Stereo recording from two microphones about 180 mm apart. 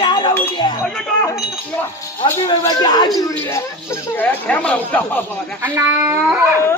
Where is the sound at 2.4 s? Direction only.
20° left (ahead or behind).